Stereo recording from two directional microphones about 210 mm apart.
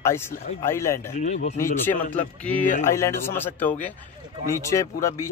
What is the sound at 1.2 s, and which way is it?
Speech, 35° left (ahead or behind).